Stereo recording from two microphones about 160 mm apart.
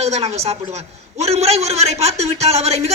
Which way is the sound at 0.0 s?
45° right (ahead or behind).